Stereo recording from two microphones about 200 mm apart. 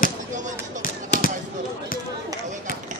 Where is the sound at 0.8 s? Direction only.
40° left (ahead or behind).